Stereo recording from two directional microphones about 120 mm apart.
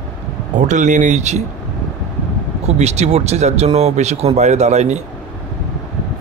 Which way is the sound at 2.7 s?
60° right (ahead or behind).